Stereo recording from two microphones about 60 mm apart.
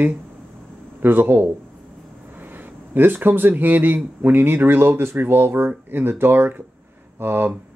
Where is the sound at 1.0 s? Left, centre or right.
Right.